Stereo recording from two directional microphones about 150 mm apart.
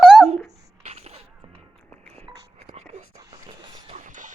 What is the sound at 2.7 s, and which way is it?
Whispering, 50° right (ahead or behind).